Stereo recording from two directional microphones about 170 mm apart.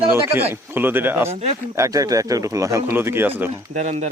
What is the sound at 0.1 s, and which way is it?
Speech, 15° right (ahead or behind).